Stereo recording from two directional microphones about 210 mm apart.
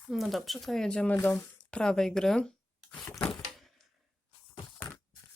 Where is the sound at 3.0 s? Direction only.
15° left (ahead or behind).